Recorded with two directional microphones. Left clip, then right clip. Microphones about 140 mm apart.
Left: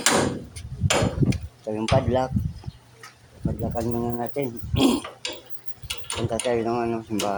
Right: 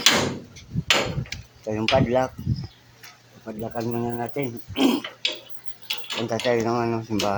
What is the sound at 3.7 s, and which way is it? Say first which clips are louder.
Speech: right 1 dB; 10° right (ahead or behind).